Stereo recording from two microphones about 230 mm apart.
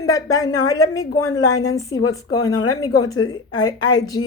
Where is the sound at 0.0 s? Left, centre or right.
Centre.